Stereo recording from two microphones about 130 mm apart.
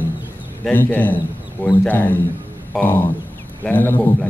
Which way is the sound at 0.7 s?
15° left (ahead or behind).